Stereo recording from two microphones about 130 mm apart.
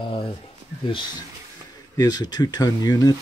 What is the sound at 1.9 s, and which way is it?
Speech, 30° left (ahead or behind).